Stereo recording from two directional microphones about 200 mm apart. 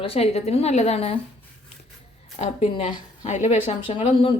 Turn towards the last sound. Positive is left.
turn(degrees=25)  # may be behind; listen again after turning